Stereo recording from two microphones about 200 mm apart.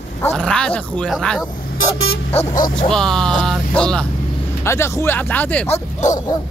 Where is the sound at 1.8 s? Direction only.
90° left.